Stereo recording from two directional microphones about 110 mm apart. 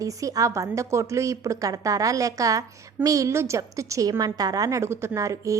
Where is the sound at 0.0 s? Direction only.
30° right (ahead or behind).